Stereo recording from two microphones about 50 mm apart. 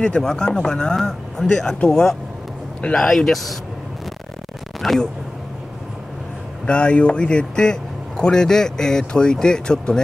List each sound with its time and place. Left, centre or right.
0.2 s a man's voice: centre
0.9 s a man's voice: centre
4.8 s speech: centre
6.6 s a man's voice: centre